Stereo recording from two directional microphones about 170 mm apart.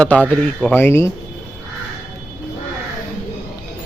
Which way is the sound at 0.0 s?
10° left (ahead or behind).